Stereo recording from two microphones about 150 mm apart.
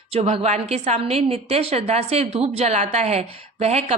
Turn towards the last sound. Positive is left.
turn(degrees=-45)  # may be behind; listen again after turning